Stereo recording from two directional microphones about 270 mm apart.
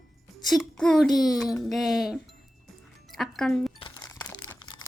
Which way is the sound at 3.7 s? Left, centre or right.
Centre.